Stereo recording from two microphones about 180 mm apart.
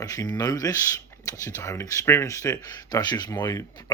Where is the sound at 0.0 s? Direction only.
20° left (ahead or behind).